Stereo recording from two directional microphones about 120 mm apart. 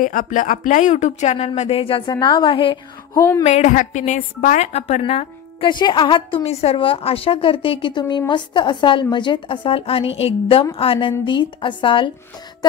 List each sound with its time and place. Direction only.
0.1 s a woman's voice: 90° left; by 2.8 s 45° left (ahead or behind)
3.4 s speech: 75° left (ahead or behind); by 5.3 s 60° left (ahead or behind)
5.6 s a woman's voice: 40° left (ahead or behind)